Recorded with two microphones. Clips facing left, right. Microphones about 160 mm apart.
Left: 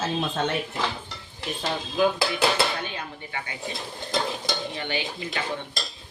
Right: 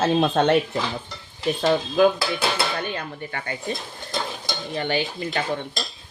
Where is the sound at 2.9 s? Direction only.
50° right (ahead or behind).